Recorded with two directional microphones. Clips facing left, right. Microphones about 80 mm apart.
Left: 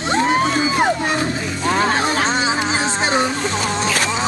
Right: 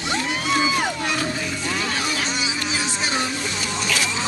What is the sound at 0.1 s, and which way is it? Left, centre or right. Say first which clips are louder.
Music: left 7 dB; left.